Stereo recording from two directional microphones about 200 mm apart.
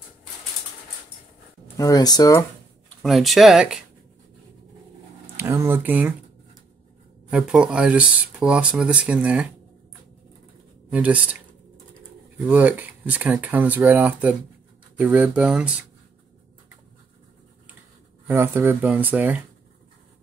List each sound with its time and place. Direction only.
1.8 s speech: 20° left (ahead or behind)
3.0 s speech: centre (ahead or behind)
5.2 s a sound: 10° right (ahead or behind)
7.2 s speech: 5° right (ahead or behind)
10.9 s speech: 5° right (ahead or behind)
12.4 s speech: 10° right (ahead or behind)
18.2 s speech: 10° right (ahead or behind)